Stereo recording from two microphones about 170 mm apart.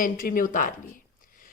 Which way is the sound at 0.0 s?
55° left (ahead or behind).